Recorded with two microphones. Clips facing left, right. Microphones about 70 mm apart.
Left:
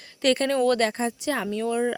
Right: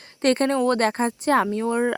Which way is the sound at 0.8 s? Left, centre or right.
Right.